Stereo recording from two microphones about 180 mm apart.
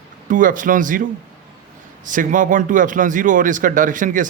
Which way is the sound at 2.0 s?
45° right (ahead or behind).